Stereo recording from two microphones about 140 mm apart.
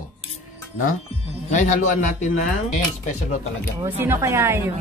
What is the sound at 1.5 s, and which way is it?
Speech, 60° left (ahead or behind).